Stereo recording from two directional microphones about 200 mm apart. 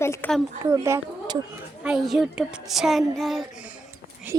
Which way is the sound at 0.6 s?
15° right (ahead or behind).